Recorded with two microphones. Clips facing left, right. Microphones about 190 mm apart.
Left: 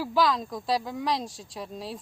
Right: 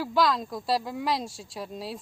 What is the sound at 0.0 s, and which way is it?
A woman's voice, centre (ahead or behind).